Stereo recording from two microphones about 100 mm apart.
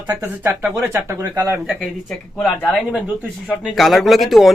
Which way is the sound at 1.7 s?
Centre (ahead or behind).